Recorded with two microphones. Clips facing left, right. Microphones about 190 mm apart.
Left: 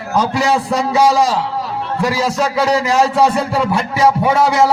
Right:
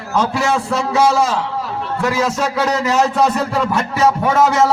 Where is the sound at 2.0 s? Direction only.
35° left (ahead or behind).